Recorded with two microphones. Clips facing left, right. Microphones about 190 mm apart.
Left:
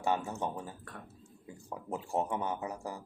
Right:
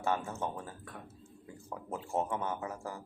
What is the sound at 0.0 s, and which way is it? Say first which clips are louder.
Speech: left 1 dB; 15° left (ahead or behind).